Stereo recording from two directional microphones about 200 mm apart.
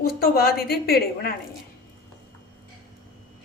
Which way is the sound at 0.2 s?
50° left (ahead or behind).